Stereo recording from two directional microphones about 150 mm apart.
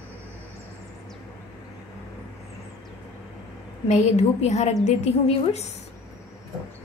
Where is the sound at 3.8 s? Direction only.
50° left (ahead or behind).